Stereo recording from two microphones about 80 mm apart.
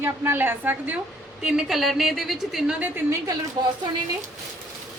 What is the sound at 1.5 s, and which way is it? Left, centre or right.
A woman's voice, centre.